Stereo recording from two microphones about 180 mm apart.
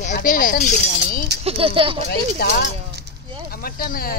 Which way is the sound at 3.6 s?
55° left (ahead or behind).